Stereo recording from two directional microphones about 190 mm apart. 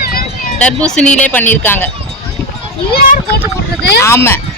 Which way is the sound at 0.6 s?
5° left (ahead or behind).